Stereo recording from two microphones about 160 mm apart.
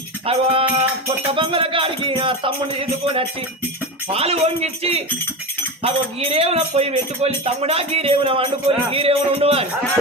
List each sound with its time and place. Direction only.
0.3 s speech: 40° right (ahead or behind)